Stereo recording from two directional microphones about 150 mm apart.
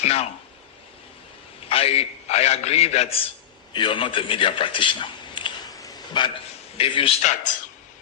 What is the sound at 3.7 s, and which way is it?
A man's voice, 35° left (ahead or behind).